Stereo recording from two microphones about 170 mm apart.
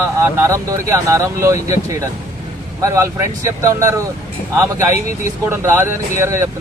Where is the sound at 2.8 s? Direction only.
15° right (ahead or behind).